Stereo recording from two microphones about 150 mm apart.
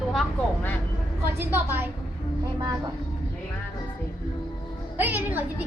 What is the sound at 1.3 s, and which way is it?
Speech, 15° right (ahead or behind).